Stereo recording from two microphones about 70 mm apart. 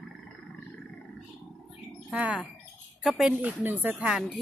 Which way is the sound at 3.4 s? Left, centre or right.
Right.